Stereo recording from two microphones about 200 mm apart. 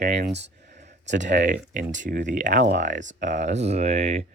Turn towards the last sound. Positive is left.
turn(degrees=-30)  # may be behind; listen again after turning